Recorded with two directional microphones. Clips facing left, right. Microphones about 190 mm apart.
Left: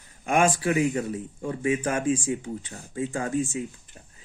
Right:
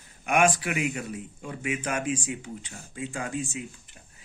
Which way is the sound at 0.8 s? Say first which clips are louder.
Left 6 dB; 15° right (ahead or behind).